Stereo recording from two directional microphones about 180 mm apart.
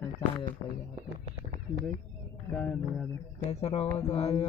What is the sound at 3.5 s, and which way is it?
Speech, 35° left (ahead or behind).